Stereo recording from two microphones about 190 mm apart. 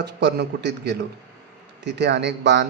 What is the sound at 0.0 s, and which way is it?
A man's voice, 60° right (ahead or behind).